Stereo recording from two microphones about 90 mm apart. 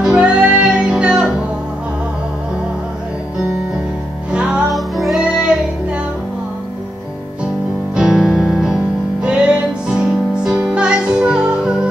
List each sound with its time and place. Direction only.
0.0 s music: 10° right (ahead or behind)
4.3 s music: 10° right (ahead or behind)
4.7 s music: centre (ahead or behind)
7.9 s music: 5° right (ahead or behind)